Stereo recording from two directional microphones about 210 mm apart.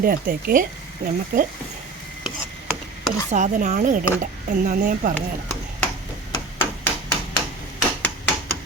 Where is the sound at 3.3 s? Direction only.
35° right (ahead or behind).